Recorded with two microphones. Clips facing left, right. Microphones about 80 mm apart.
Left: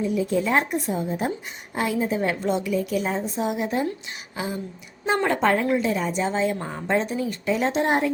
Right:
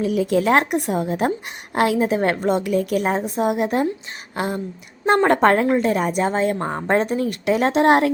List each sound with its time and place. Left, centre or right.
0.0 s a woman's voice: right